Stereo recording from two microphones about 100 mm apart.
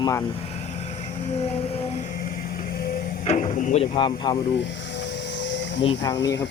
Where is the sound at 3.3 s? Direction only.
90° left.